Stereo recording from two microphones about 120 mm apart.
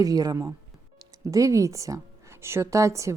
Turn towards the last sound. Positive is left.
turn(degrees=-25)  # may be behind; listen again after turning